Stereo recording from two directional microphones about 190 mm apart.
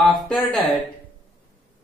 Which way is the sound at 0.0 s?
Centre (ahead or behind).